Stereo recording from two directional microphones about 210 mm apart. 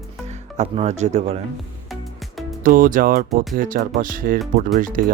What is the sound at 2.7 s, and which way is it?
Speech, 40° right (ahead or behind).